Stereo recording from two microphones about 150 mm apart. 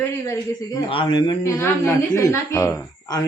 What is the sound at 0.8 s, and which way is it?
A woman's voice, 30° left (ahead or behind).